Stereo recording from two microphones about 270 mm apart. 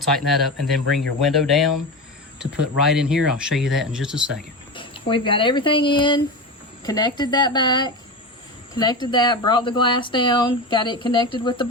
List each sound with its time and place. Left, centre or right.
0.0 s speech: centre
4.7 s speech: centre